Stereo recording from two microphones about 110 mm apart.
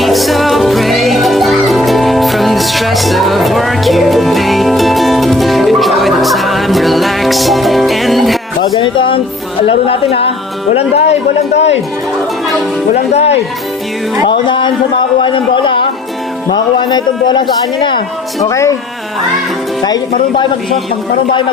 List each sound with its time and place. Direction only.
0.0 s music: centre (ahead or behind)
8.6 s speech: 50° left (ahead or behind)
10.8 s a man's voice: 75° left (ahead or behind)
13.1 s a man's voice: 70° left (ahead or behind)
14.3 s a man's voice: 45° left (ahead or behind)
18.4 s speech: 25° left (ahead or behind)
19.8 s a man's voice: 45° left (ahead or behind)